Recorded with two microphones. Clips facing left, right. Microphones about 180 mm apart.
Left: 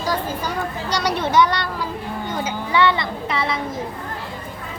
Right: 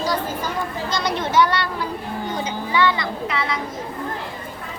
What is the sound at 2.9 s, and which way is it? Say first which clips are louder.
Speech: left 1 dB; 30° left (ahead or behind).